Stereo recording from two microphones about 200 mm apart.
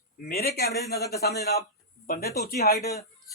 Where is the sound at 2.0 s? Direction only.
50° left (ahead or behind).